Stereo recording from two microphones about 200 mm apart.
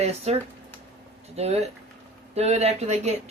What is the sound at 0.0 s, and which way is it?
Speech, 30° right (ahead or behind).